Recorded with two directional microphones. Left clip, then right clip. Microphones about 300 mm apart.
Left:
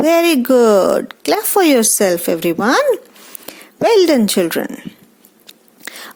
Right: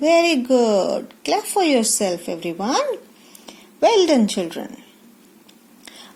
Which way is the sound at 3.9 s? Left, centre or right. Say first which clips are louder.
Left 6 dB; left.